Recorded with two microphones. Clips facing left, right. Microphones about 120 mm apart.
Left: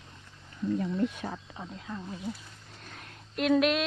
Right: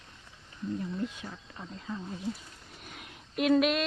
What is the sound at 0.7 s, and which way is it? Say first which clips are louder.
Speech: left 5 dB; 90° left.